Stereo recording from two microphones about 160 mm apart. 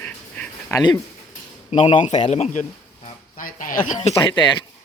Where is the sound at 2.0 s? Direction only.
45° left (ahead or behind).